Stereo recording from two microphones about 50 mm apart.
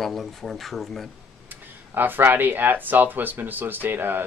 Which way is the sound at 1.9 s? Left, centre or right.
Right.